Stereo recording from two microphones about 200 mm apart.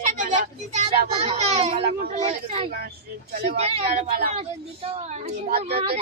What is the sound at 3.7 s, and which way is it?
Speech, 30° right (ahead or behind).